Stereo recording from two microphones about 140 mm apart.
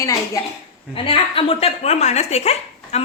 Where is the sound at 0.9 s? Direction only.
40° left (ahead or behind).